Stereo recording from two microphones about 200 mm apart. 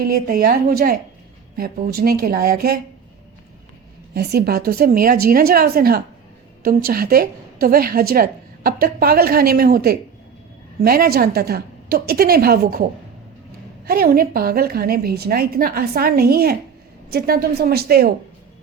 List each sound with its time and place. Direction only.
0.0 s a woman's voice: 45° right (ahead or behind)
4.1 s a woman's voice: 55° right (ahead or behind)
13.8 s a woman's voice: 50° right (ahead or behind)